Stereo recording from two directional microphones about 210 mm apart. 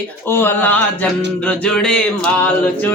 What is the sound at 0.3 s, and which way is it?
Speech, 10° left (ahead or behind).